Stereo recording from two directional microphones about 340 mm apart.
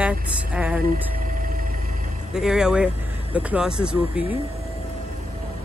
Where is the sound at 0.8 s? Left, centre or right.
Right.